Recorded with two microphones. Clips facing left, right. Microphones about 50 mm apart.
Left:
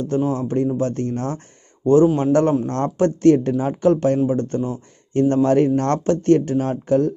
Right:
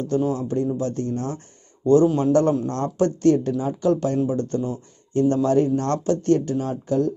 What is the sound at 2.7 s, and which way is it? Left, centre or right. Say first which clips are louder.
Speech: left 3 dB; left.